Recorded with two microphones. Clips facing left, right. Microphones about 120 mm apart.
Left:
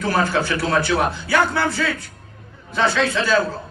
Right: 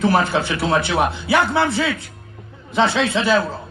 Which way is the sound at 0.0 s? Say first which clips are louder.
Right 2 dB; 25° right (ahead or behind).